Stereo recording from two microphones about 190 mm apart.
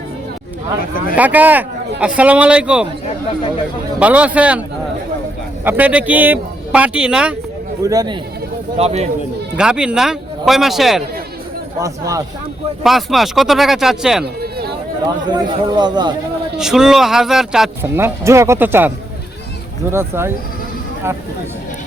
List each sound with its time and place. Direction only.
1.1 s speech: 10° right (ahead or behind)
4.0 s speech: 5° right (ahead or behind)
5.6 s speech: 10° right (ahead or behind)
7.9 s speech: 20° right (ahead or behind)
8.8 s a man's voice: 35° right (ahead or behind)
9.6 s speech: 5° right (ahead or behind)
11.8 s speech: 15° right (ahead or behind)
12.8 s speech: centre (ahead or behind)
15.0 s speech: 20° right (ahead or behind)
16.6 s speech: 5° right (ahead or behind)
17.8 s speech: 10° right (ahead or behind)